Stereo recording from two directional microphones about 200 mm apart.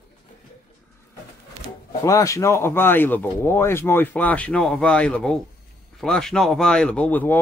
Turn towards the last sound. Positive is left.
turn(degrees=10)  # may be behind; listen again after turning